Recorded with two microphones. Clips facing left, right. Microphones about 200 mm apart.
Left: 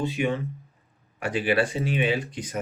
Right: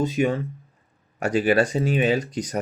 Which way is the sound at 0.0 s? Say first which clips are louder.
Right 4 dB; 40° right (ahead or behind).